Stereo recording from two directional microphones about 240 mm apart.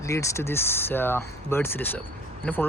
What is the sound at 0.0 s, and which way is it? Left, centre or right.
Speech, centre.